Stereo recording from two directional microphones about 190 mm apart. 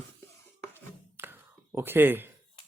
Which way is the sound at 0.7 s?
10° right (ahead or behind).